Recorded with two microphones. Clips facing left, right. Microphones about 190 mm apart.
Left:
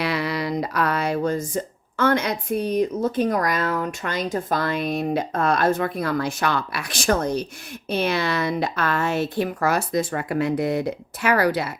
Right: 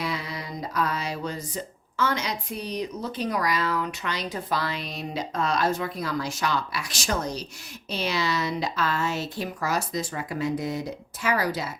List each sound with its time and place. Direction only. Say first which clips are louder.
0.0 s speech: left 8 dB; 70° left (ahead or behind)